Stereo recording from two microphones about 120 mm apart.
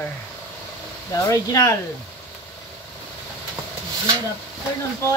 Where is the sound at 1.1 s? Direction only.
25° left (ahead or behind).